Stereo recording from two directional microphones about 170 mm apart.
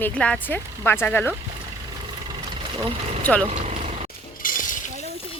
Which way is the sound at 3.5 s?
40° right (ahead or behind).